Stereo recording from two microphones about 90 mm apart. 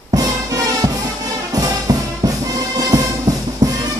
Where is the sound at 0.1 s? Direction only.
45° right (ahead or behind).